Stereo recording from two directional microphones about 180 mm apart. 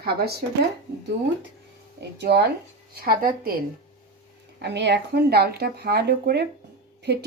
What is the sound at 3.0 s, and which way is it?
Speech, 55° right (ahead or behind).